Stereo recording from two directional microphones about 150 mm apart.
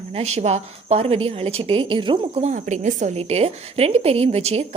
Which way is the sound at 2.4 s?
55° right (ahead or behind).